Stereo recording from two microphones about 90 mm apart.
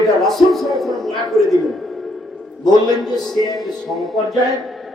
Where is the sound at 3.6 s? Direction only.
Centre (ahead or behind).